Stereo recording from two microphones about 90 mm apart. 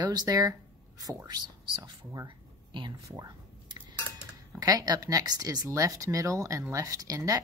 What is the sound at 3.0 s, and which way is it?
Speech, 40° right (ahead or behind).